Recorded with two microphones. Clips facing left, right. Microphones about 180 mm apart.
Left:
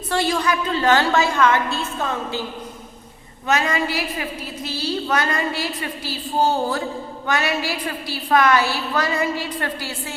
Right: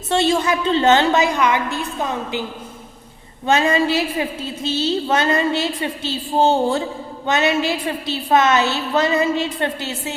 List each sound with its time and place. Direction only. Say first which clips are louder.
0.1 s a woman's voice: right 4 dB; 25° right (ahead or behind)
3.4 s a woman's voice: right 5 dB; 25° right (ahead or behind)